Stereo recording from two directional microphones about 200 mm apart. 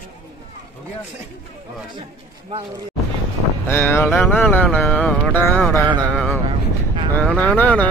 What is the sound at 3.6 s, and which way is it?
Music, 10° left (ahead or behind).